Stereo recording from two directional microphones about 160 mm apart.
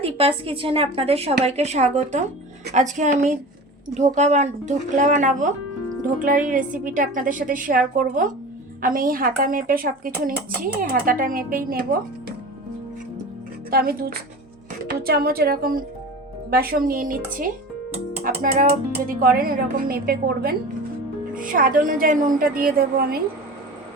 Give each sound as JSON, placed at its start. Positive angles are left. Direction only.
{"t": 0.0, "sound": "a woman's voice", "side_deg": -35}
{"t": 13.7, "sound": "a woman's voice", "side_deg": -70}
{"t": 21.3, "sound": "speech", "side_deg": -60}
{"t": 22.5, "sound": "a woman's voice", "side_deg": -70}